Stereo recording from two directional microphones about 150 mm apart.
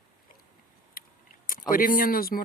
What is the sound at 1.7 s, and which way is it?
Speech, 70° left (ahead or behind).